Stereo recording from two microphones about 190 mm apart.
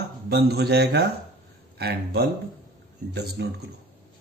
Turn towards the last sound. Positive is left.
turn(degrees=-60)  # may be behind; listen again after turning